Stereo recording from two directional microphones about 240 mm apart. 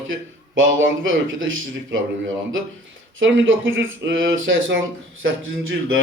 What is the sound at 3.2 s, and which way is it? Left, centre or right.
Speech, right.